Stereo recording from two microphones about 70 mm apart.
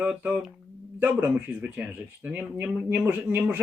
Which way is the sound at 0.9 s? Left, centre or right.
Centre.